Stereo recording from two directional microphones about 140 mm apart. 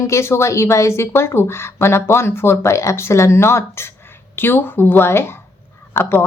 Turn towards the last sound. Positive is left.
turn(degrees=15)  # may be behind; listen again after turning